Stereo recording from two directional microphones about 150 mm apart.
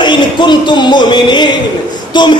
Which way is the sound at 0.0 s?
30° left (ahead or behind).